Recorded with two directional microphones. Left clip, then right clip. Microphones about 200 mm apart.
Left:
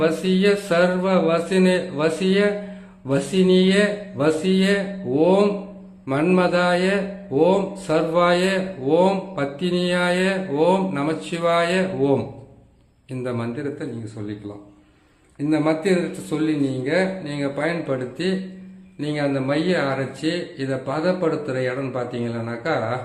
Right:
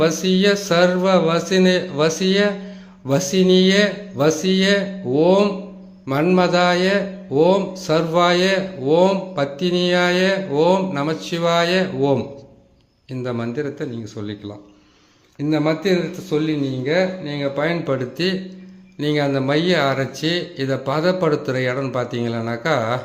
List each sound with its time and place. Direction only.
0.0 s a man's voice: 20° right (ahead or behind)
15.4 s a man's voice: 25° right (ahead or behind)